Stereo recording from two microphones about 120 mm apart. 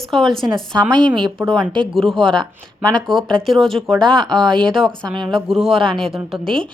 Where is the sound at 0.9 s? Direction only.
40° right (ahead or behind).